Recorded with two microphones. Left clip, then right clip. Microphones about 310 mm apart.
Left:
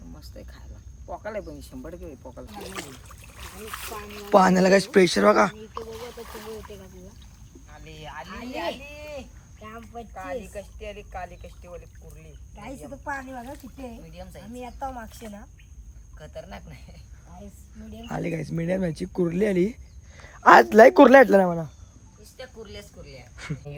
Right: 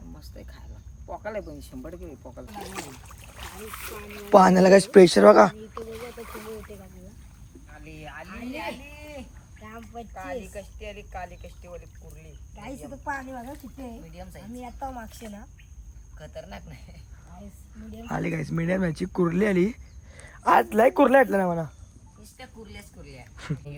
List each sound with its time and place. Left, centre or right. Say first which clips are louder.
0.1 s speech: left 2 dB; centre
8.3 s speech: left 2 dB; centre
9.6 s speech: left 1 dB; centre
20.4 s speech: left 7 dB; left
21.4 s speech: left 1 dB; centre
23.0 s speech: right 3 dB; centre